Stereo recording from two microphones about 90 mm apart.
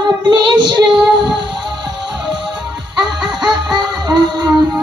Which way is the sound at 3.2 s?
55° right (ahead or behind).